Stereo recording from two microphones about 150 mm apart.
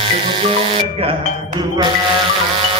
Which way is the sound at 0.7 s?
40° right (ahead or behind).